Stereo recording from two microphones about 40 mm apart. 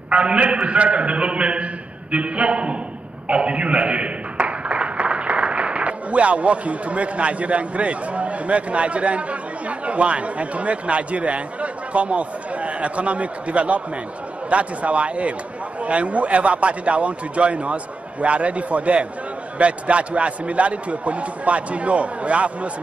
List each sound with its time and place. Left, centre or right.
0.1 s a man's voice: right